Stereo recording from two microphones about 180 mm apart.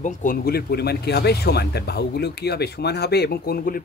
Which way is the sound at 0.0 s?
50° left (ahead or behind).